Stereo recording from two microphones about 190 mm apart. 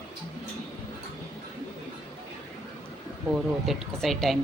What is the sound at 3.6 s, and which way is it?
Speech, centre (ahead or behind).